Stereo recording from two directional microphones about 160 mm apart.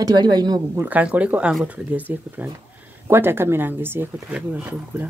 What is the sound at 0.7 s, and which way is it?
Speech, 10° right (ahead or behind).